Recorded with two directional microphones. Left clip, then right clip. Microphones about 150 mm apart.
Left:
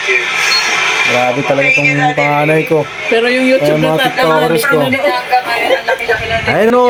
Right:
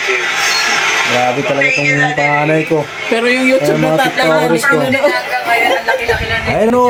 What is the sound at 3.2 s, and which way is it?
Speech, 35° right (ahead or behind).